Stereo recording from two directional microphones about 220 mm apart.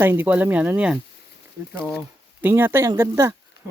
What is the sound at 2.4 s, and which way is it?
Speech, 10° right (ahead or behind).